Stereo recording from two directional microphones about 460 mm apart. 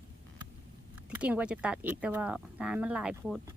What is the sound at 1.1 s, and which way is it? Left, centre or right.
Speech, centre.